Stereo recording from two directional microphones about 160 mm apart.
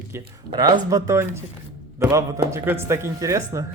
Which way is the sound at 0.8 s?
20° right (ahead or behind).